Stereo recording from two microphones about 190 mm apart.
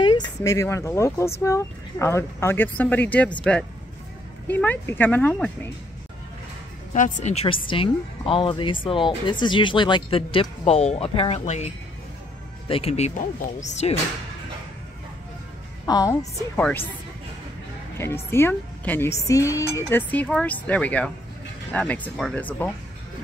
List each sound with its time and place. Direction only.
0.4 s a woman's voice: 15° left (ahead or behind)
4.5 s a woman's voice: 10° left (ahead or behind)
6.9 s speech: 40° left (ahead or behind)
15.8 s a woman's voice: 15° left (ahead or behind)
17.9 s a woman's voice: 15° left (ahead or behind)